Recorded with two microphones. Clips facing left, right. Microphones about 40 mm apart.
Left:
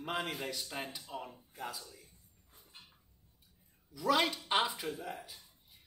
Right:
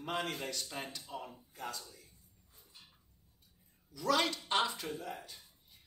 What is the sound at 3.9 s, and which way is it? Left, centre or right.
A man's voice, centre.